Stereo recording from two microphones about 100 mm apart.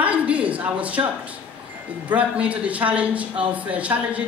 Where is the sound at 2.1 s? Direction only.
15° right (ahead or behind).